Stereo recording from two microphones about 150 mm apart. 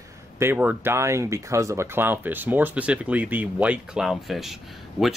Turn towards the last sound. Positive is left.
turn(degrees=0)  # may be behind; listen again after turning